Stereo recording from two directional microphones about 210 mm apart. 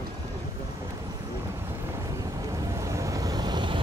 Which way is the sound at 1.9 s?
15° right (ahead or behind).